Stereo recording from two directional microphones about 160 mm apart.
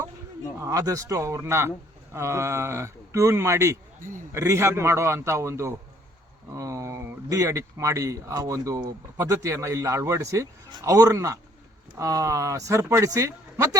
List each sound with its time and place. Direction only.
0.6 s speech: 20° right (ahead or behind)